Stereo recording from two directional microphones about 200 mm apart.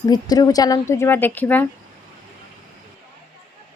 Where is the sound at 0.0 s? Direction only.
20° left (ahead or behind).